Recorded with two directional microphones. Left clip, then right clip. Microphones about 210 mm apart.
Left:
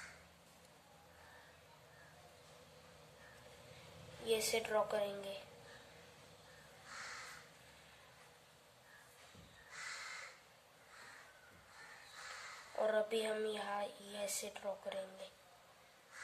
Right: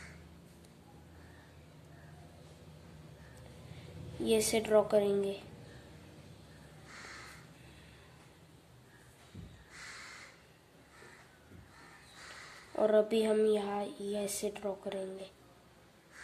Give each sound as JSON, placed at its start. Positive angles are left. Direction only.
{"t": 4.3, "sound": "a woman's voice", "side_deg": -30}
{"t": 12.7, "sound": "speech", "side_deg": -30}